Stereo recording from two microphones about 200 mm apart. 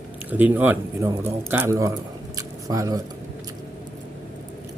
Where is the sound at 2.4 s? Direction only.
15° right (ahead or behind).